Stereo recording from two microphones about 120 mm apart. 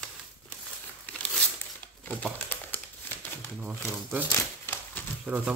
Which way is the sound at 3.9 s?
15° right (ahead or behind).